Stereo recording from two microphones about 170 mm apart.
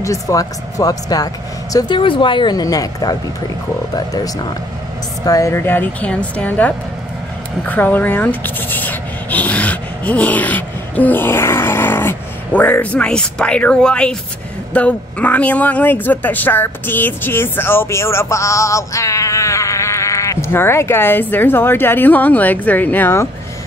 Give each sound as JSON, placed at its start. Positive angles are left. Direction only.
{"t": 0.0, "sound": "speech", "side_deg": 20}